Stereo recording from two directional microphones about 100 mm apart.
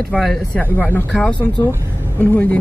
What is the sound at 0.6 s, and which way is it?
Speech, 20° left (ahead or behind).